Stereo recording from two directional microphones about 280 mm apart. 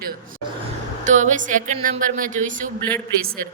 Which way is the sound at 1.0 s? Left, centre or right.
Right.